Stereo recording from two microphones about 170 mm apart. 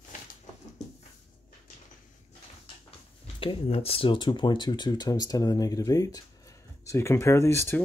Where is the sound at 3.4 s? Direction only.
35° left (ahead or behind).